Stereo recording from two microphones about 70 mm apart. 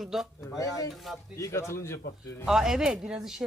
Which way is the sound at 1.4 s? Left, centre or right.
Left.